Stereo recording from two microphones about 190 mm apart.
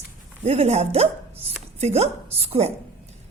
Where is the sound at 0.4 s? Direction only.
35° right (ahead or behind).